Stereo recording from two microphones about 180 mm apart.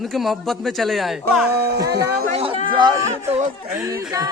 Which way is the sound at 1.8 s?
65° right (ahead or behind).